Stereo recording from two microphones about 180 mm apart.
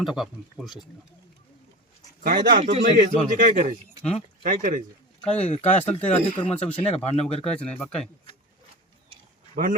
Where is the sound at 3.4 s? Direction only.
45° right (ahead or behind).